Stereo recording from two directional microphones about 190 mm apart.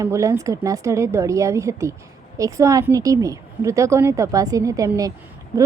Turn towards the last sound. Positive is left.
turn(degrees=-20)  # may be behind; listen again after turning